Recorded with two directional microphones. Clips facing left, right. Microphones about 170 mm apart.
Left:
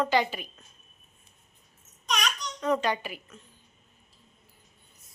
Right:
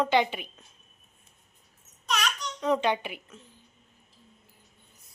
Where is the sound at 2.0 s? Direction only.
5° right (ahead or behind).